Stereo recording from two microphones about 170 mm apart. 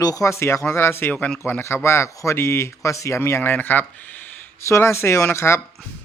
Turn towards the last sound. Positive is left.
turn(degrees=15)  # may be behind; listen again after turning